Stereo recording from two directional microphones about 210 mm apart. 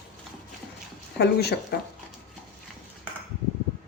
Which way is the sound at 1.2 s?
50° left (ahead or behind).